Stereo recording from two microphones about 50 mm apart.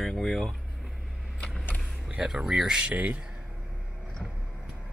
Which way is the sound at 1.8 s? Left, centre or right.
Centre.